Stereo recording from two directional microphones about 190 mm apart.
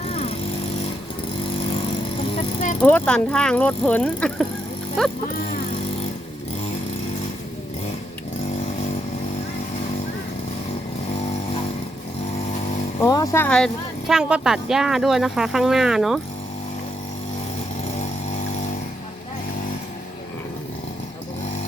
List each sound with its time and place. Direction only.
0.1 s vehicle: 30° left (ahead or behind)
2.3 s vehicle: 40° left (ahead or behind)
2.8 s speech: 10° left (ahead or behind)
13.0 s speech: 20° left (ahead or behind)
14.1 s speech: 5° right (ahead or behind)